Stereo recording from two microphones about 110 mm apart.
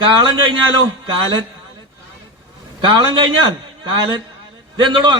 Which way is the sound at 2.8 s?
45° right (ahead or behind).